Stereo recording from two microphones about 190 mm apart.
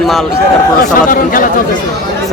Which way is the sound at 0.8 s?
45° left (ahead or behind).